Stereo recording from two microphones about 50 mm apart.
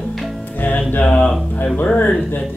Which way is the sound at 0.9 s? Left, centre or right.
Left.